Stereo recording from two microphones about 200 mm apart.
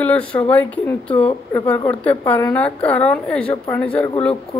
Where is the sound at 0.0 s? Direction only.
5° left (ahead or behind).